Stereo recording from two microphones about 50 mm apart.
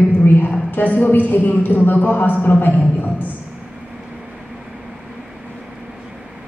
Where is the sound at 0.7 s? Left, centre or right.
Left.